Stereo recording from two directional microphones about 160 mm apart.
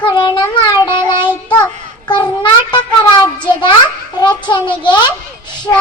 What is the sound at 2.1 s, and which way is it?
Child singing, 30° left (ahead or behind).